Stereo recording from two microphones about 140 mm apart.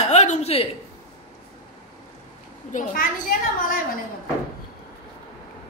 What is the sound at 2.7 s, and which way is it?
Speech, 65° left (ahead or behind).